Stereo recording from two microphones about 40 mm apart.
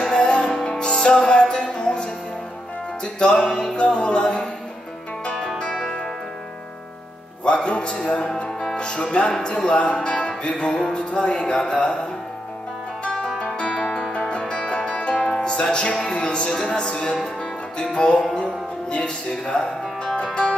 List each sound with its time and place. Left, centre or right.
0.2 s music: left
3.7 s music: left
5.6 s music: centre
7.4 s speech: left
8.5 s music: centre
13.6 s music: left